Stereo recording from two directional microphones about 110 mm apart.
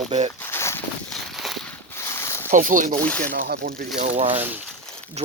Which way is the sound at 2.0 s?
25° left (ahead or behind).